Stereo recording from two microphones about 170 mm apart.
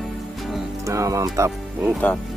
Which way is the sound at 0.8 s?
20° right (ahead or behind).